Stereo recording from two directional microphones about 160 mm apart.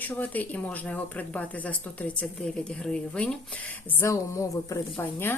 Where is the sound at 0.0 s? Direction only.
10° left (ahead or behind).